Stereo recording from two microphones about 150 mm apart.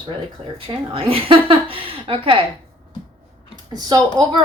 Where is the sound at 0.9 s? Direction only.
40° right (ahead or behind).